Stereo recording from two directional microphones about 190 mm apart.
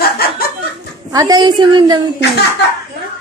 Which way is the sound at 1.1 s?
20° right (ahead or behind).